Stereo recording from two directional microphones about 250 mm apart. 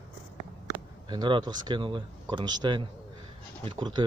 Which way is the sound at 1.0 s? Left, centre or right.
Centre.